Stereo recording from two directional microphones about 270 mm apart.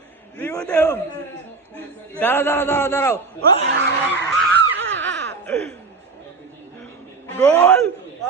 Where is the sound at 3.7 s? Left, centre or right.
Right.